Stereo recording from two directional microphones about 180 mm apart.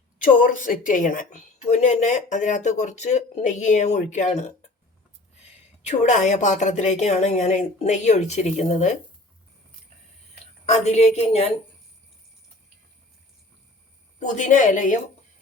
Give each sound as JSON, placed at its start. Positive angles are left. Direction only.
{"t": 0.2, "sound": "a woman's voice", "side_deg": 50}
{"t": 5.8, "sound": "a woman's voice", "side_deg": 40}
{"t": 10.4, "sound": "a woman's voice", "side_deg": 35}
{"t": 14.2, "sound": "a woman's voice", "side_deg": 45}